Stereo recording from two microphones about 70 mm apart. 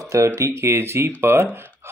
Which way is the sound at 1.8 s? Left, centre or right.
Right.